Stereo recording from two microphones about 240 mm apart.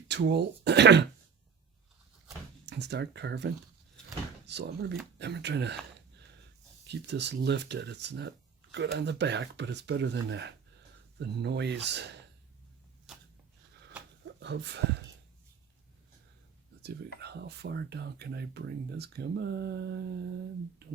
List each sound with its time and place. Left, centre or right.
0.1 s speech: right
2.6 s speech: right
6.8 s speech: right
14.3 s a sound: right
16.8 s speech: right